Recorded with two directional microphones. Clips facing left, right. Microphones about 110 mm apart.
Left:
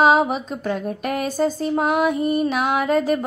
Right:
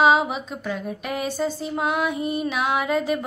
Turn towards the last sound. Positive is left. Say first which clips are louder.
# left 3 dB
turn(degrees=45)  # may be behind; listen again after turning